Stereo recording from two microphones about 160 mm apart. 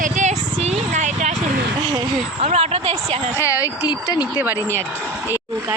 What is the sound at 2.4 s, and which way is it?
Speech, 40° right (ahead or behind).